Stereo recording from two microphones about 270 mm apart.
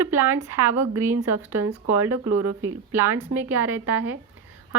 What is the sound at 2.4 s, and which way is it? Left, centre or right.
Speech, right.